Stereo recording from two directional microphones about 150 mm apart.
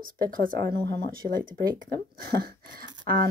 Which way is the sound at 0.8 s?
80° right.